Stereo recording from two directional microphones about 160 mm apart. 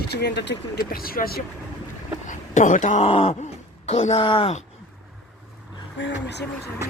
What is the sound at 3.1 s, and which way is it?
Speech, 35° left (ahead or behind).